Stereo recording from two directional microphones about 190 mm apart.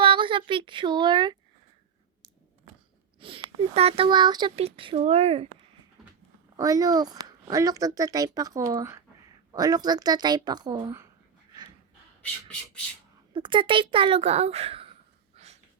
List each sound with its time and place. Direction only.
0.0 s speech: 25° right (ahead or behind)
3.2 s speech: 30° right (ahead or behind)
6.6 s speech: 20° right (ahead or behind)
13.3 s speech: 25° right (ahead or behind)